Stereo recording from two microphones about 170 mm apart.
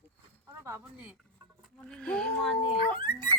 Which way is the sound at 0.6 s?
15° right (ahead or behind).